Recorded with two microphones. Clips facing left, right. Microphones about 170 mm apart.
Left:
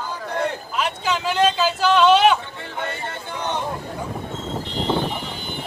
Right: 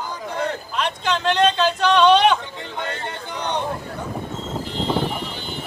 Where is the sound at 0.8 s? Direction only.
5° left (ahead or behind).